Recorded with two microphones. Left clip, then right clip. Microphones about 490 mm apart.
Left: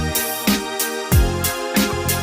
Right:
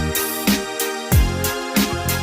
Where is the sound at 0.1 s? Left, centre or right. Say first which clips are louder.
Even; centre.